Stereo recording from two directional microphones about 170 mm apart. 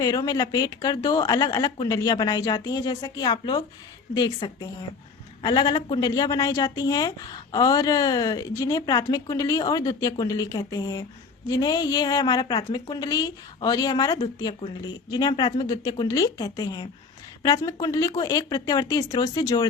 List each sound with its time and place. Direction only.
0.0 s a woman's voice: 20° left (ahead or behind)